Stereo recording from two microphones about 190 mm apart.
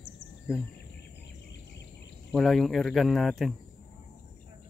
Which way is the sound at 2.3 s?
Centre (ahead or behind).